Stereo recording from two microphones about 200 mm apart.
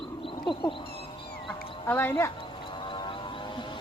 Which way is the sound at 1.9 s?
10° left (ahead or behind).